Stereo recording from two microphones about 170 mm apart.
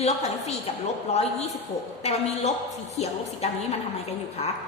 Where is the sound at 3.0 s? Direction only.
40° left (ahead or behind).